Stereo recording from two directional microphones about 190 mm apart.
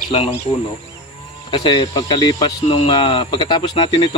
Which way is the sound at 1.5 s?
25° left (ahead or behind).